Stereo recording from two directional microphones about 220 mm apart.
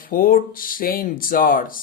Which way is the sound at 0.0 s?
40° left (ahead or behind).